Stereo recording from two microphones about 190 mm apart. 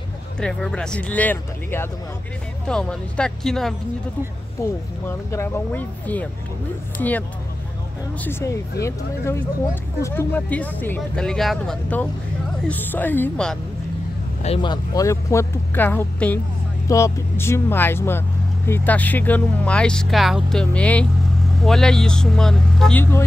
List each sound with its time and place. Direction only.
0.4 s speech: 5° left (ahead or behind)
4.6 s speech: 15° left (ahead or behind)
14.4 s speech: 30° left (ahead or behind); by 23.2 s 10° left (ahead or behind)